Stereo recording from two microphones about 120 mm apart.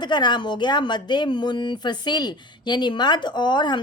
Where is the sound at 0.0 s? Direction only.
40° left (ahead or behind).